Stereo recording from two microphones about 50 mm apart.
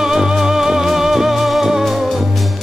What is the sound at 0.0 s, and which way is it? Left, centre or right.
Music, centre.